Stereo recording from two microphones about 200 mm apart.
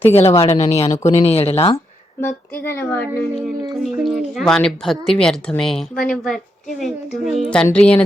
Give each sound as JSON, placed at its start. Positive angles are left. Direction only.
{"t": 0.0, "sound": "speech", "side_deg": 30}
{"t": 2.8, "sound": "a woman's voice", "side_deg": 10}